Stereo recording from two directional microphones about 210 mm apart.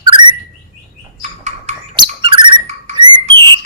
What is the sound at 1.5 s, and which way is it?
Bird, 25° right (ahead or behind).